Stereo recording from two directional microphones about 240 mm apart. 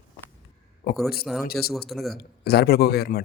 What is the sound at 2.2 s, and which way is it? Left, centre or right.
Speech, left.